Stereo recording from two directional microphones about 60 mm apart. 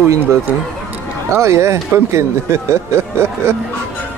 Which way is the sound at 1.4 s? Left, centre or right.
Right.